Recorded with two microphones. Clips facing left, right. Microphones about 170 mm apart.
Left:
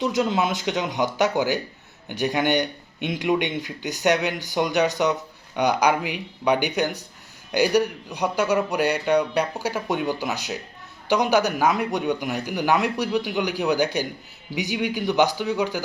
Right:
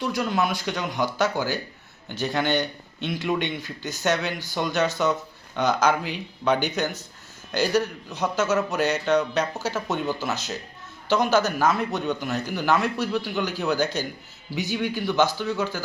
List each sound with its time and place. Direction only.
0.0 s a man's voice: 20° left (ahead or behind)